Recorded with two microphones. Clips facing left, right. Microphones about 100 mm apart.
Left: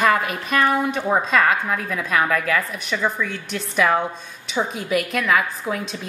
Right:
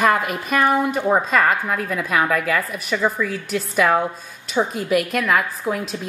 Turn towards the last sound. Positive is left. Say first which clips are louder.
# right 2 dB
turn(degrees=0)  # may be behind; listen again after turning